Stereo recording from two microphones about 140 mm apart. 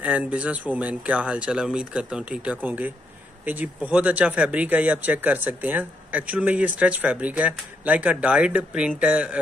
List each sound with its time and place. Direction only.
0.0 s speech: 10° right (ahead or behind)